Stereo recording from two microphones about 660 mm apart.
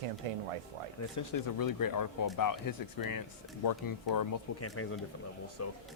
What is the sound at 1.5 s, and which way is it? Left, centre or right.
Speech, left.